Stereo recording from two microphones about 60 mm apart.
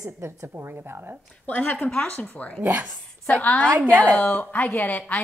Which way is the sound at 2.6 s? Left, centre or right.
Right.